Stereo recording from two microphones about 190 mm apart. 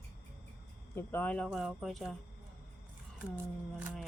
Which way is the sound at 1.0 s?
10° left (ahead or behind).